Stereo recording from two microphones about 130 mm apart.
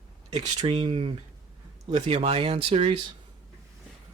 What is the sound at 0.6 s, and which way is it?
Speech, 50° right (ahead or behind).